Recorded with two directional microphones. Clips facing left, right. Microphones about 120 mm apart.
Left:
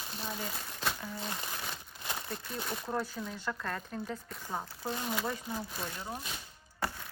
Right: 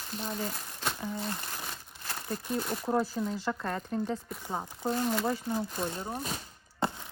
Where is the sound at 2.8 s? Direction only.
30° right (ahead or behind).